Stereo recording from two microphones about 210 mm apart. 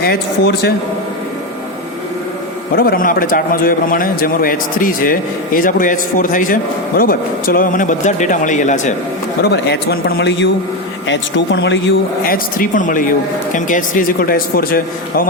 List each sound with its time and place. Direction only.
0.0 s a man's voice: 50° left (ahead or behind)
2.7 s a man's voice: 45° left (ahead or behind)
9.4 s a man's voice: 50° left (ahead or behind)
12.2 s a man's voice: 40° left (ahead or behind)